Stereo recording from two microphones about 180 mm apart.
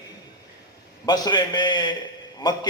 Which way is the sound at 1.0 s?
20° left (ahead or behind).